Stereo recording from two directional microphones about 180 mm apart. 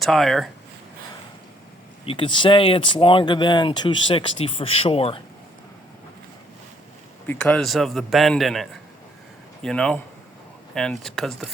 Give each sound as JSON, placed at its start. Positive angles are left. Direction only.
{"t": 0.0, "sound": "a man's voice", "side_deg": 0}
{"t": 2.0, "sound": "speech", "side_deg": 30}
{"t": 7.3, "sound": "a man's voice", "side_deg": 5}
{"t": 9.6, "sound": "a man's voice", "side_deg": 5}